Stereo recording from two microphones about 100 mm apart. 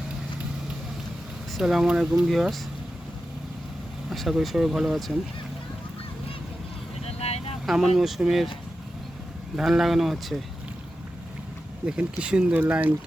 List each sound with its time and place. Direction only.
1.5 s speech: 5° right (ahead or behind)
4.1 s speech: centre (ahead or behind)
7.0 s vehicle: 90° left
7.7 s speech: centre (ahead or behind)
9.6 s speech: centre (ahead or behind)
12.2 s speech: 10° right (ahead or behind)